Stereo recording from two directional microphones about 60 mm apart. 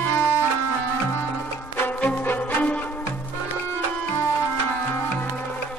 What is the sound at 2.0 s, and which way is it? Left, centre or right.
Music, left.